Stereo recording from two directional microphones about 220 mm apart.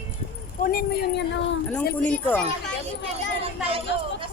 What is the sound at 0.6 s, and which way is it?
Speech, 40° left (ahead or behind).